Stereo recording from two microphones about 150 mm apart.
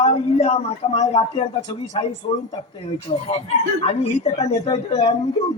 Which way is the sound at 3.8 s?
40° left (ahead or behind).